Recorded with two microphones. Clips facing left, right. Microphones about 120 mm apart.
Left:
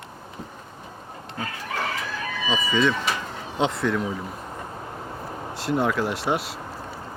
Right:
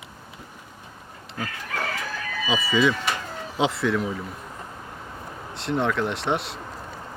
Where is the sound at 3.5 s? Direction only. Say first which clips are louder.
Even; 5° right (ahead or behind).